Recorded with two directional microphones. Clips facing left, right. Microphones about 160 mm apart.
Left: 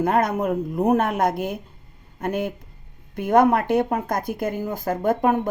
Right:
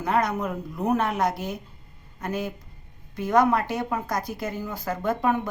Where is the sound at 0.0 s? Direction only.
50° left (ahead or behind).